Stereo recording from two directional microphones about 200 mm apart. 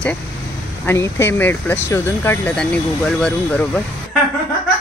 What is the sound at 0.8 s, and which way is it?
Speech, 15° left (ahead or behind).